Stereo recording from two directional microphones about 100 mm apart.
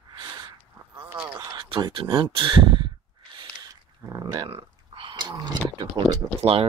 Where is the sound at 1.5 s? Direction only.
45° right (ahead or behind).